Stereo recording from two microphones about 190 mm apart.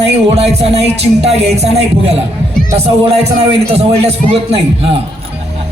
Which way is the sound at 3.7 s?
35° right (ahead or behind).